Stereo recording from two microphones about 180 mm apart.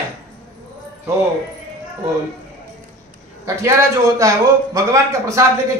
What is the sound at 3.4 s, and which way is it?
A man's voice, 15° right (ahead or behind).